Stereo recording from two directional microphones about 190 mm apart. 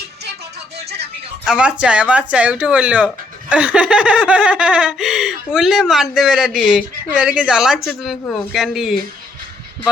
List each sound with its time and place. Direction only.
1.5 s snicker: 5° right (ahead or behind)